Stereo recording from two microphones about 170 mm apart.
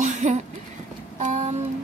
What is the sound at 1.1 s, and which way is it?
Child singing, 45° right (ahead or behind).